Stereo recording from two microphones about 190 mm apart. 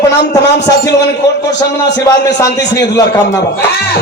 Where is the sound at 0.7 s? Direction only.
15° left (ahead or behind).